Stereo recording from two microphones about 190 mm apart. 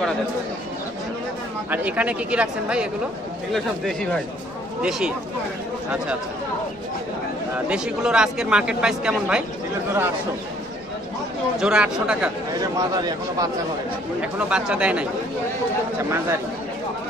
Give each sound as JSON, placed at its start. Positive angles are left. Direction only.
{"t": 1.7, "sound": "speech", "side_deg": -5}
{"t": 7.6, "sound": "speech", "side_deg": -5}
{"t": 11.5, "sound": "speech", "side_deg": -5}
{"t": 12.7, "sound": "speech", "side_deg": -20}
{"t": 14.2, "sound": "speech", "side_deg": -5}